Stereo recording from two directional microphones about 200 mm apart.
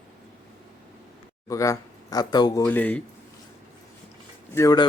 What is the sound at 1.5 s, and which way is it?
Speech, 15° left (ahead or behind).